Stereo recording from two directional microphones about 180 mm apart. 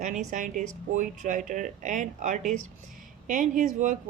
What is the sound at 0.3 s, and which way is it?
Speech, 45° right (ahead or behind).